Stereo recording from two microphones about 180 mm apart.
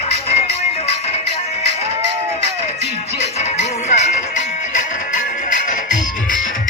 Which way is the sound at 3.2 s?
40° left (ahead or behind).